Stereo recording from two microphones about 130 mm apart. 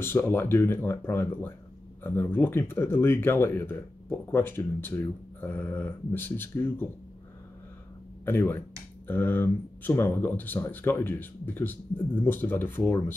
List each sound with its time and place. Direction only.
0.0 s speech: 15° left (ahead or behind)
8.3 s speech: 15° left (ahead or behind)